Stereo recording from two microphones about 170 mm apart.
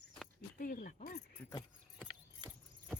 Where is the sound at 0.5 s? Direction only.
55° left (ahead or behind).